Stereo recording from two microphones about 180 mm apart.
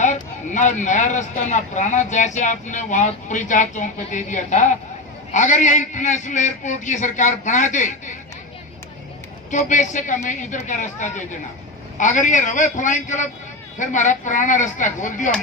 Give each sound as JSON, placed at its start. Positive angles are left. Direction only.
{"t": 0.0, "sound": "speech", "side_deg": 40}
{"t": 9.5, "sound": "speech", "side_deg": 45}